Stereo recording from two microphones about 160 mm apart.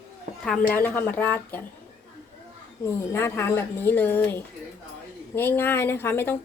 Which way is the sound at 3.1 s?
15° left (ahead or behind).